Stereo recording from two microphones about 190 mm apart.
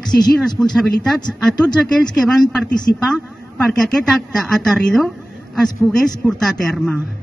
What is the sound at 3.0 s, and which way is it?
Speech, centre (ahead or behind).